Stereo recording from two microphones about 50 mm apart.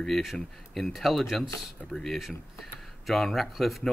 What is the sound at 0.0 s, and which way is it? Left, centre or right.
Speech, centre.